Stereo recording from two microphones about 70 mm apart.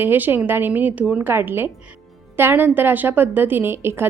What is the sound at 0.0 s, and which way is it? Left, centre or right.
A woman's voice, right.